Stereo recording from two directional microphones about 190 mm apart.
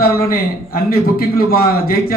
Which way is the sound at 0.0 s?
50° left (ahead or behind).